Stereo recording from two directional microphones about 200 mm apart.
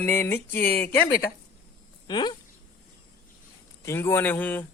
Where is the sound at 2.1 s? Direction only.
20° left (ahead or behind).